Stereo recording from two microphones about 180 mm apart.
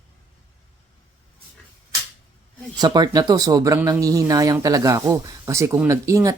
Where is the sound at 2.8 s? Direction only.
20° right (ahead or behind).